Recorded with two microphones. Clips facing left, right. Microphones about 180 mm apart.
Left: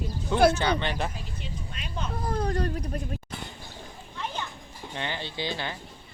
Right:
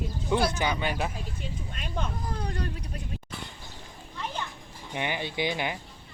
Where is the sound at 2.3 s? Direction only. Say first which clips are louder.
Left 6 dB; 40° left (ahead or behind).